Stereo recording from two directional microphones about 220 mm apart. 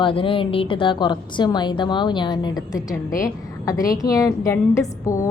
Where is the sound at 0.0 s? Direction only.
25° left (ahead or behind).